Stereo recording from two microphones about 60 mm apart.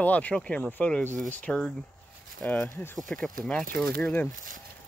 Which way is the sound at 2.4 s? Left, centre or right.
Left.